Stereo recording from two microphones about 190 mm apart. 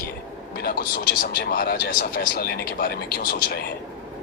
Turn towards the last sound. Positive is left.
turn(degrees=55)  # may be behind; listen again after turning